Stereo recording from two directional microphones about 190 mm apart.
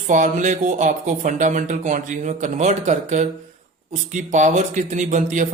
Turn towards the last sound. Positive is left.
turn(degrees=-40)  # may be behind; listen again after turning